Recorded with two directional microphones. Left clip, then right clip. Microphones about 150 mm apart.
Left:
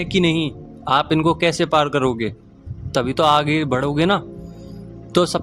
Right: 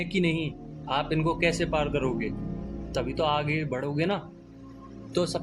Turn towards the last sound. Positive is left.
turn(degrees=75)  # may be behind; listen again after turning